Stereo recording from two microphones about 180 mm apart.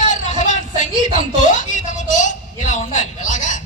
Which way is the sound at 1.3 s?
45° left (ahead or behind).